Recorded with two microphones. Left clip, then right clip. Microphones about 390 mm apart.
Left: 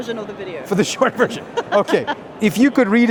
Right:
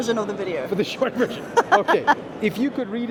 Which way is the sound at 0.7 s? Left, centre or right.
Left.